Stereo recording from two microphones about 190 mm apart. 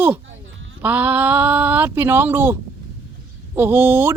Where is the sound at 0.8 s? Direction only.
10° right (ahead or behind).